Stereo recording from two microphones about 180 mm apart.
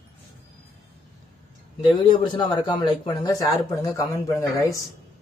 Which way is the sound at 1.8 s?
30° left (ahead or behind).